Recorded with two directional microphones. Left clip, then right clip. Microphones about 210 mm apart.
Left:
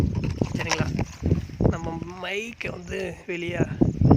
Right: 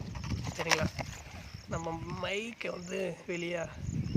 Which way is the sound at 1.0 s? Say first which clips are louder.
Left 7 dB; 15° left (ahead or behind).